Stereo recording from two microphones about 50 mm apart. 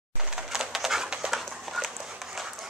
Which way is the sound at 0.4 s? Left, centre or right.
Centre.